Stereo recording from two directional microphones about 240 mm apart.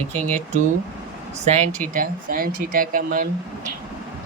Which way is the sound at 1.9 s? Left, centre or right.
Right.